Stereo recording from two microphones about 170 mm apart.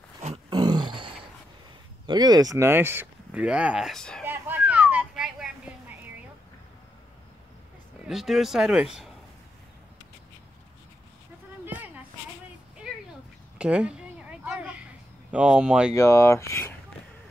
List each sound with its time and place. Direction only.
0.5 s grunt: 25° right (ahead or behind)
2.0 s speech: 25° right (ahead or behind); by 4.2 s 5° left (ahead or behind)
4.2 s a sound: 10° right (ahead or behind)
8.1 s speech: centre (ahead or behind)
12.9 s a sound: 5° right (ahead or behind)
15.3 s speech: 5° right (ahead or behind)
15.9 s speech: 15° left (ahead or behind)